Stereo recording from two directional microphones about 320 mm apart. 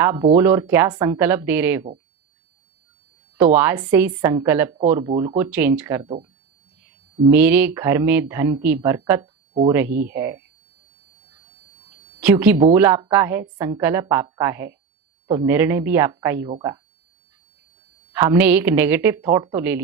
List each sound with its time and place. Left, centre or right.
0.0 s speech: centre
3.3 s speech: centre
7.3 s speech: centre
9.7 s speech: centre
12.2 s speech: centre
18.1 s speech: centre